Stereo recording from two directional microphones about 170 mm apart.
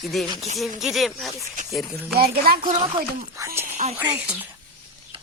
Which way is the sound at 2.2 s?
65° right (ahead or behind).